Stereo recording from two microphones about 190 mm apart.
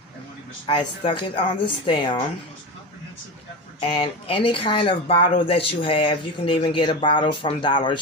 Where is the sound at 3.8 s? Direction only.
30° left (ahead or behind).